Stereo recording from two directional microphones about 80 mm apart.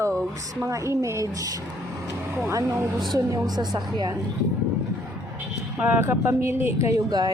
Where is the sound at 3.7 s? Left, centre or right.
Right.